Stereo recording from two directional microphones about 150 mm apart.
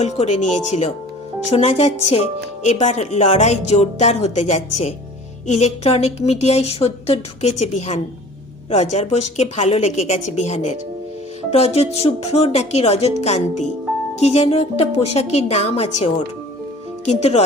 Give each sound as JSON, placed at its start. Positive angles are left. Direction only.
{"t": 0.0, "sound": "speech", "side_deg": 50}
{"t": 17.1, "sound": "speech", "side_deg": 45}